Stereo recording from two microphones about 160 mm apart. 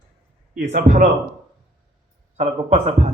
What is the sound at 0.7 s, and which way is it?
Speech, 60° right (ahead or behind).